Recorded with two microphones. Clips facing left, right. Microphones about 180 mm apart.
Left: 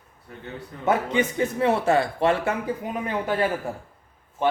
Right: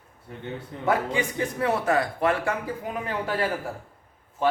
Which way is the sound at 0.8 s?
25° left (ahead or behind).